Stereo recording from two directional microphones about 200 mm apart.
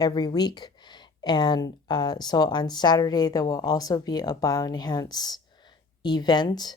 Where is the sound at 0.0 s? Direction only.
20° left (ahead or behind).